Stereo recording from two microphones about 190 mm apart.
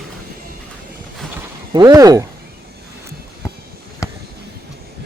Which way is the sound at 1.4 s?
20° right (ahead or behind).